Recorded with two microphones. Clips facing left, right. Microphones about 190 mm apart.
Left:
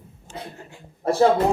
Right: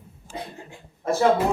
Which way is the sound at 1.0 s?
30° left (ahead or behind).